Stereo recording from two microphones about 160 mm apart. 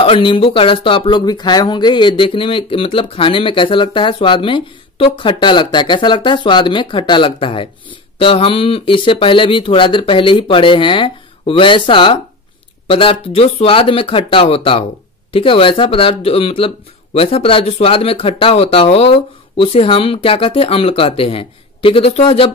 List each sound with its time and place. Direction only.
0.0 s speech: 35° left (ahead or behind)